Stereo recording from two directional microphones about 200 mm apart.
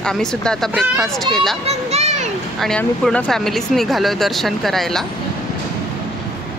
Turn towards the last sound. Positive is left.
turn(degrees=0)  # may be behind; listen again after turning